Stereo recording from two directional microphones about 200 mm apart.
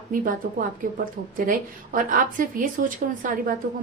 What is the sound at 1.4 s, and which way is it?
A woman's voice, 45° right (ahead or behind).